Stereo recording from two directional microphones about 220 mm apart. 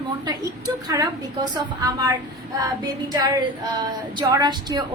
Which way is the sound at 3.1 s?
20° right (ahead or behind).